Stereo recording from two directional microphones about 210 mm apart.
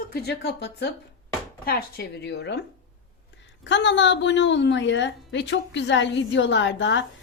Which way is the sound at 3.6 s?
60° left (ahead or behind).